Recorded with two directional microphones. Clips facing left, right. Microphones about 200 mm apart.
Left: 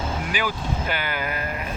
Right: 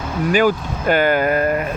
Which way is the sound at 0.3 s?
45° right (ahead or behind).